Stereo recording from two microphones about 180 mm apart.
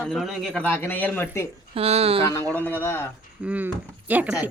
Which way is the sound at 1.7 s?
35° right (ahead or behind).